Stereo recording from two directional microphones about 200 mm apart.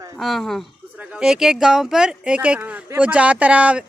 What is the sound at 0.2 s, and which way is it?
Speech, centre (ahead or behind).